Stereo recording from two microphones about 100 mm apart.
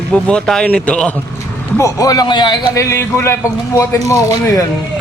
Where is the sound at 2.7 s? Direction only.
25° left (ahead or behind).